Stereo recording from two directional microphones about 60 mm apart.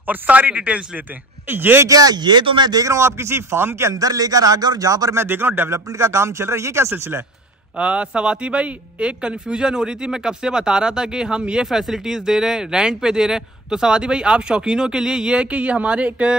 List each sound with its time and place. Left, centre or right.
0.0 s a man's voice: right
1.5 s a man's voice: right
1.9 s speech: right
2.7 s a man's voice: right
3.0 s a man's voice: right
3.9 s speech: right
5.1 s a man's voice: right
5.7 s a man's voice: right
7.7 s speech: centre